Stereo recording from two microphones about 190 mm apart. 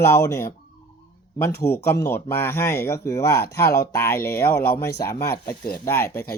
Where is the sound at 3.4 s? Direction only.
55° left (ahead or behind).